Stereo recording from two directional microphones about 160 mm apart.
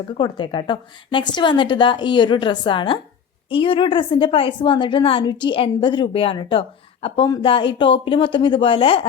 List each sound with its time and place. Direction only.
0.1 s a woman's voice: 30° left (ahead or behind)